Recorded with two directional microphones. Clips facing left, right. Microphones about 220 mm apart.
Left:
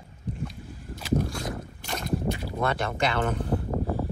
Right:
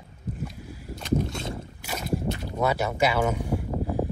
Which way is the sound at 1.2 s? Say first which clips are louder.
Even; 25° right (ahead or behind).